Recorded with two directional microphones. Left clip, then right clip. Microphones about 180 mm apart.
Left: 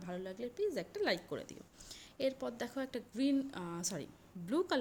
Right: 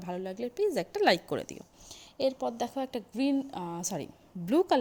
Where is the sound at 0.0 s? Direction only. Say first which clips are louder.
Right 7 dB; 40° right (ahead or behind).